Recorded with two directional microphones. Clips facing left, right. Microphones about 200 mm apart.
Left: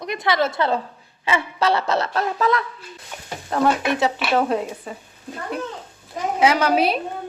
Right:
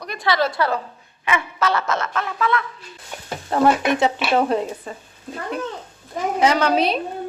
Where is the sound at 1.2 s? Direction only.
30° left (ahead or behind).